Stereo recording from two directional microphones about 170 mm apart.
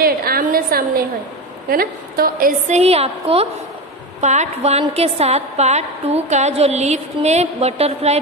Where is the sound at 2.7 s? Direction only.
40° right (ahead or behind).